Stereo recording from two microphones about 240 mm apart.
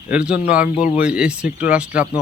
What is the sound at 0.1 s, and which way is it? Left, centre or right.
Speech, centre.